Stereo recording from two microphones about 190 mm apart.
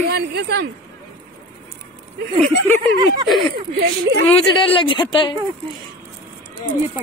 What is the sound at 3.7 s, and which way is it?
Speech, 60° right (ahead or behind).